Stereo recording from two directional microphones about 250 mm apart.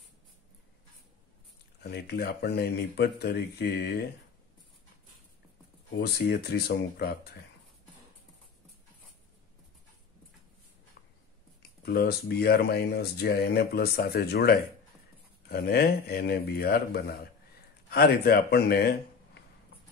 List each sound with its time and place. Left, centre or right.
1.8 s speech: left
5.9 s speech: left
11.8 s speech: left